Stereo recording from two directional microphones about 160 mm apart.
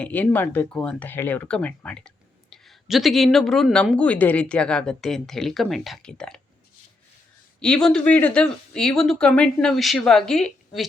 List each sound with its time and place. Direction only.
0.0 s speech: 10° left (ahead or behind)
7.6 s speech: 5° left (ahead or behind)